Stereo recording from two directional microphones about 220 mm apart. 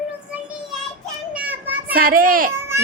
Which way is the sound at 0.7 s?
5° right (ahead or behind).